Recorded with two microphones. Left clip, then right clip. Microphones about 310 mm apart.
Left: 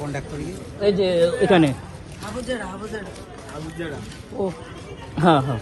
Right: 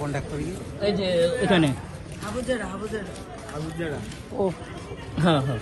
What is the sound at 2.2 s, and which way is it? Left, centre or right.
Speech, centre.